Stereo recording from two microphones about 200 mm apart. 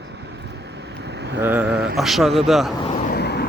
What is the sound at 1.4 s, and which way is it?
A man's voice, 10° right (ahead or behind).